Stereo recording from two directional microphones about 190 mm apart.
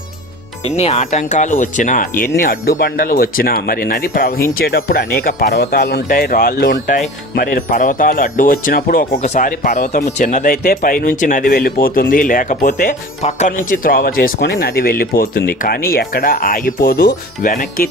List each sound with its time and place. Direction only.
0.7 s speech: 35° left (ahead or behind)